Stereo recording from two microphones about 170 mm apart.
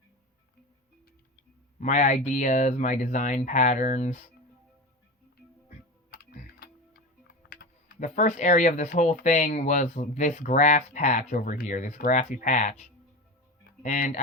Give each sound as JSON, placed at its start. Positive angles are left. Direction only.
{"t": 1.8, "sound": "speech", "side_deg": 45}
{"t": 5.6, "sound": "music", "side_deg": 60}
{"t": 7.3, "sound": "typing", "side_deg": 60}
{"t": 8.0, "sound": "speech", "side_deg": 45}